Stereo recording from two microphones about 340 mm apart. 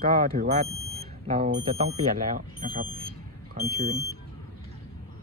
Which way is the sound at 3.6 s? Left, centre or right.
Right.